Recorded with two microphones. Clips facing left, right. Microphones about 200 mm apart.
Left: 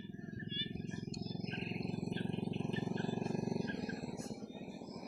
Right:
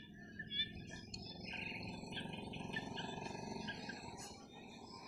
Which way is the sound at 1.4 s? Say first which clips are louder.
Left 8 dB; 60° left (ahead or behind).